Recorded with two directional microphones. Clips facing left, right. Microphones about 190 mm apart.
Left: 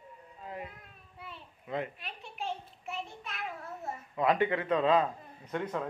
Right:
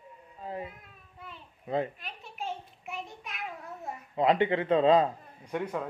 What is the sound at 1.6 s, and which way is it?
Speech, 30° right (ahead or behind).